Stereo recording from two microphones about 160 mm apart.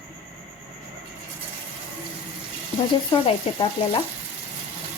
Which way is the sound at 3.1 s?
35° left (ahead or behind).